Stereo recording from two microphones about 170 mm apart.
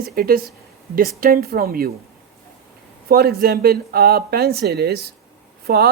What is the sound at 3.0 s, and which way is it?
Speech, 65° right (ahead or behind).